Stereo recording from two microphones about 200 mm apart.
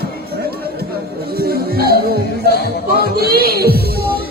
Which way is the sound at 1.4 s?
50° right (ahead or behind).